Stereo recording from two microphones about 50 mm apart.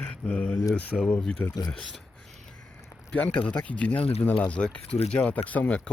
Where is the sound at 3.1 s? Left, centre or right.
Left.